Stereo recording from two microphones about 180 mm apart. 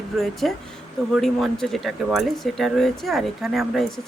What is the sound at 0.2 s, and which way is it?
Speech, centre (ahead or behind).